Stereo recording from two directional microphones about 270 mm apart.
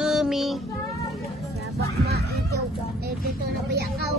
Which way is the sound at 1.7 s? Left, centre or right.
Right.